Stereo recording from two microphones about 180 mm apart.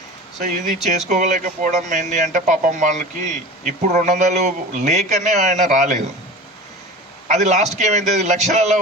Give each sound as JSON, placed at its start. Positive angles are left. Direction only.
{"t": 0.4, "sound": "speech", "side_deg": -45}
{"t": 7.3, "sound": "a man's voice", "side_deg": -40}